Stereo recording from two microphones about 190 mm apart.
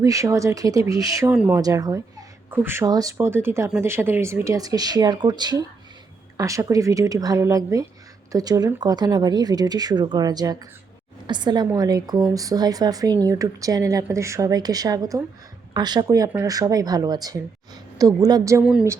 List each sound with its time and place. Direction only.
0.0 s speech: 15° right (ahead or behind)
1.3 s speech: 5° right (ahead or behind)
1.5 s speech: 20° right (ahead or behind)
18.6 s speech: 5° right (ahead or behind)